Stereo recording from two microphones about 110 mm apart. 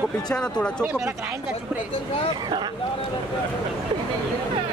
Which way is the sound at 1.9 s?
60° left (ahead or behind).